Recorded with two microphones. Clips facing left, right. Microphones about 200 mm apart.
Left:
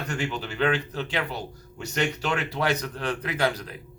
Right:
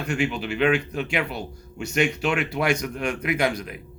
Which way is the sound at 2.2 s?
35° left (ahead or behind).